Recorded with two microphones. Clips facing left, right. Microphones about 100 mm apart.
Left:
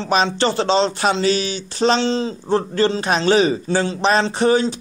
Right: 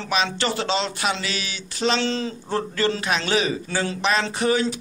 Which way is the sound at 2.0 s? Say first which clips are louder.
Left 5 dB; 25° left (ahead or behind).